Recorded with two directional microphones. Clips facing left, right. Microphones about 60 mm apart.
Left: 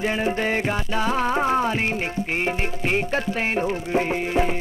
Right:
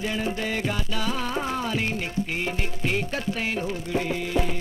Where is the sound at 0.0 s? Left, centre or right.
Left.